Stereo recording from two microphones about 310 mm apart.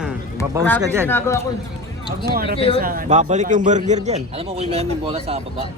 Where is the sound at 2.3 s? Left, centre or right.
Right.